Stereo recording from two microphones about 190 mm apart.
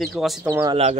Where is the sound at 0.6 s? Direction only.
30° right (ahead or behind).